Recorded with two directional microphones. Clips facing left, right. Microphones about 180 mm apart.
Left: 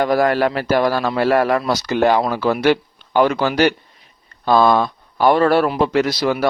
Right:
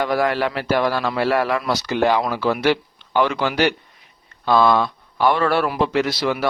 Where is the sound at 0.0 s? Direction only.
45° left (ahead or behind).